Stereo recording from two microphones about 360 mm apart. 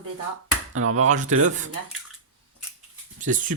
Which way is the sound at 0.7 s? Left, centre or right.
Right.